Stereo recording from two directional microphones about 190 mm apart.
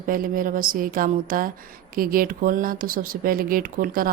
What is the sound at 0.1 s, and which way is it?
Speech, 45° right (ahead or behind).